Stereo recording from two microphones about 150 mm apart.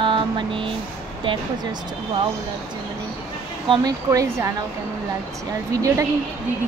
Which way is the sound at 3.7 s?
25° right (ahead or behind).